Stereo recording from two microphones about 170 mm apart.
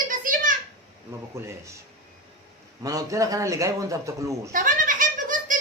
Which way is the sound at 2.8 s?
20° right (ahead or behind).